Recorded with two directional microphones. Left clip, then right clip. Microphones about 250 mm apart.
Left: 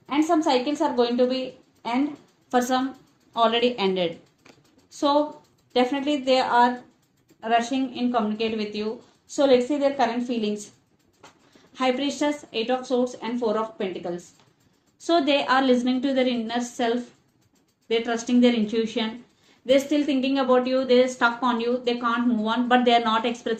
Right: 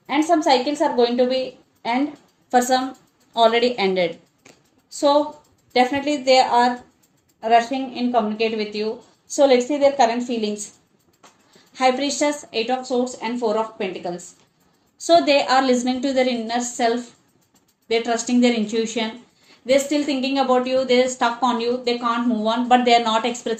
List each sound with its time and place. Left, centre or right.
0.0 s a woman's voice: right
11.7 s a woman's voice: right